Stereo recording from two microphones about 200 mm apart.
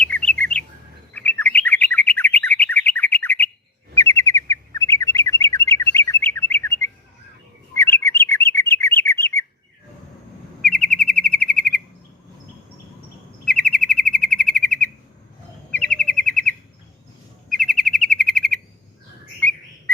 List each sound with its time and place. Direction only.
0.0 s bird: 5° left (ahead or behind)
1.1 s chirp: 10° left (ahead or behind)
3.9 s bird: 15° left (ahead or behind)
10.6 s chirp: 5° left (ahead or behind)
13.4 s bird vocalization: 5° left (ahead or behind)
13.7 s chirp: centre (ahead or behind)